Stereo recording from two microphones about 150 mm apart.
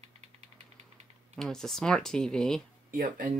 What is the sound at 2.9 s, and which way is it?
Speech, 65° right (ahead or behind).